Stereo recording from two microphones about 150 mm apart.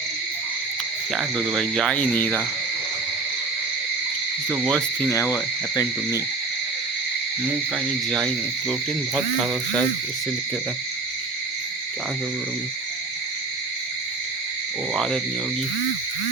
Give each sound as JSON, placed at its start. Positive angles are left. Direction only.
{"t": 1.1, "sound": "frog", "side_deg": -5}
{"t": 4.6, "sound": "frog", "side_deg": 5}
{"t": 5.0, "sound": "frog", "side_deg": 20}
{"t": 9.1, "sound": "frog", "side_deg": 0}
{"t": 14.9, "sound": "frog", "side_deg": 0}